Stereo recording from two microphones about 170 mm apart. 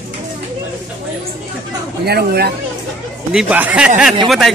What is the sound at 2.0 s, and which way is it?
Speech, 70° right (ahead or behind).